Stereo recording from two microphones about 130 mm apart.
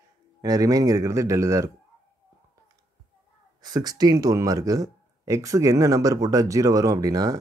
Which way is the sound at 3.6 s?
30° right (ahead or behind).